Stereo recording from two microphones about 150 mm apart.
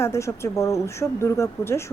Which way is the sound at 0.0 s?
20° left (ahead or behind).